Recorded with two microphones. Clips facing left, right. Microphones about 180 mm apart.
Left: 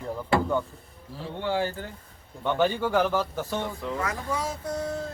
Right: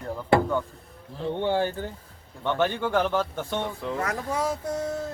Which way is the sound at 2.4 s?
10° left (ahead or behind).